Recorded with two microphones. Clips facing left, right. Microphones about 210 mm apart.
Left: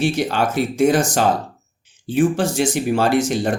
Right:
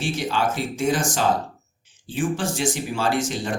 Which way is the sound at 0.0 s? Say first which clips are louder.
Left 5 dB; 65° left (ahead or behind).